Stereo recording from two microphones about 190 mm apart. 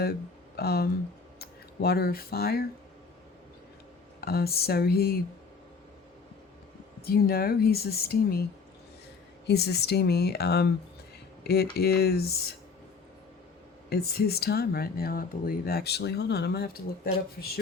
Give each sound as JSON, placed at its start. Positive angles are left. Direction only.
{"t": 0.5, "sound": "speech", "side_deg": 55}
{"t": 4.2, "sound": "speech", "side_deg": 55}
{"t": 7.0, "sound": "speech", "side_deg": 55}
{"t": 9.5, "sound": "speech", "side_deg": 60}
{"t": 13.9, "sound": "speech", "side_deg": 55}